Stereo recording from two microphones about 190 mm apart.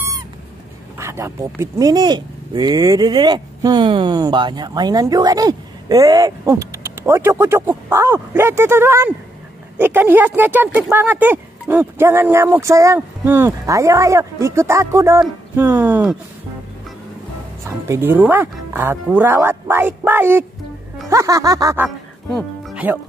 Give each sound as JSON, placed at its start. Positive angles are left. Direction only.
{"t": 0.9, "sound": "speech", "side_deg": -15}
{"t": 17.6, "sound": "speech", "side_deg": -15}
{"t": 21.8, "sound": "music", "side_deg": -5}